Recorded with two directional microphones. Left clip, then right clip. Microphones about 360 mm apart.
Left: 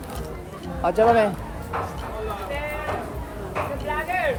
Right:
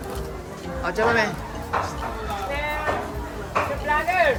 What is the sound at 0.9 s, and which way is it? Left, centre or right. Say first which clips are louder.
Speech: left 3 dB; centre.